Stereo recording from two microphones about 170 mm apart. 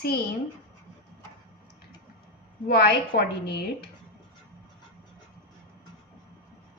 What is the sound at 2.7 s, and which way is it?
A woman's voice, 70° left (ahead or behind).